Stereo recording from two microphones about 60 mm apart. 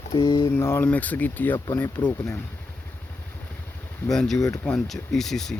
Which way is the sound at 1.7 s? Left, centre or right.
Left.